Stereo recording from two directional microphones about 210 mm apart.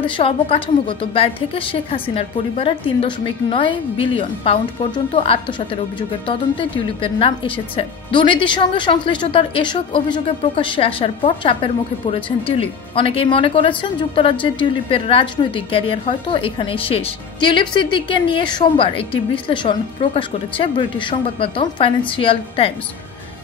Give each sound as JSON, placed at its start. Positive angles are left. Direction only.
{"t": 0.2, "sound": "speech", "side_deg": 25}